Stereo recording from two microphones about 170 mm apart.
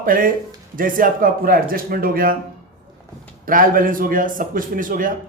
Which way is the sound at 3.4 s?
55° right (ahead or behind).